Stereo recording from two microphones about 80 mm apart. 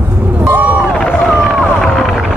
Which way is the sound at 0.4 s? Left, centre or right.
Right.